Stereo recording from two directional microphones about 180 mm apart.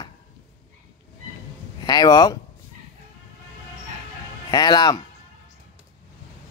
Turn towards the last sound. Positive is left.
turn(degrees=25)  # may be behind; listen again after turning